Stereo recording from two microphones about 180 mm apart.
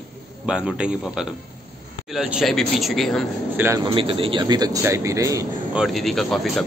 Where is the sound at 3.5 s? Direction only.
15° right (ahead or behind).